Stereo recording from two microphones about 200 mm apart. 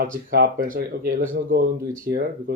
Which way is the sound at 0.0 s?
45° right (ahead or behind).